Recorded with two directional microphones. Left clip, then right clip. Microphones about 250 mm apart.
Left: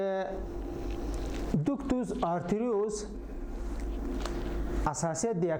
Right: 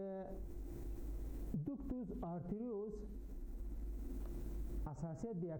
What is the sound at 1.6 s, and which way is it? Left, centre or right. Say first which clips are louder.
Speech: left 15 dB; centre.